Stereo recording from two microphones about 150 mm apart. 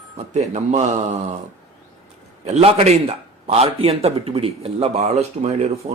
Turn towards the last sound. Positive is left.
turn(degrees=-45)  # may be behind; listen again after turning